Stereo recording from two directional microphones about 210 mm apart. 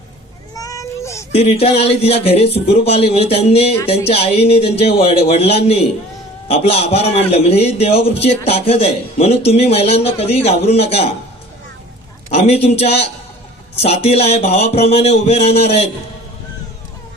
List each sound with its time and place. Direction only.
0.5 s a sound: 15° left (ahead or behind)
1.3 s a man's voice: 30° left (ahead or behind)
12.3 s a man's voice: 30° left (ahead or behind)